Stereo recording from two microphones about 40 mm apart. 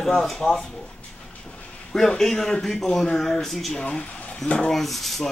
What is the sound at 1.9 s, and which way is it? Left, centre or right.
Speech, centre.